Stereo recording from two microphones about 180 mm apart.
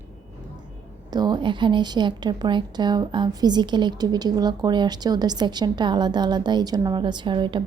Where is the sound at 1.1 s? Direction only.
25° right (ahead or behind).